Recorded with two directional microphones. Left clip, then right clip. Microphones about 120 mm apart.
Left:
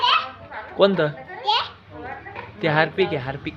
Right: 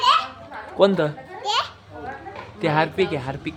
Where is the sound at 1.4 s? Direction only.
65° right (ahead or behind).